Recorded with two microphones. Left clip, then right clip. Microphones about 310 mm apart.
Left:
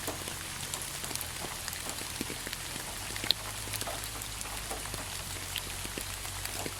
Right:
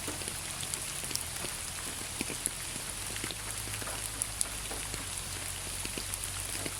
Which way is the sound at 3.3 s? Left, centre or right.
Left.